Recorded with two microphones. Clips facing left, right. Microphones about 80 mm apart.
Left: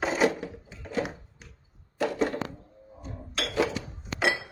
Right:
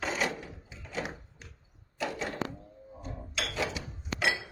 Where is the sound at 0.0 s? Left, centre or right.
Left.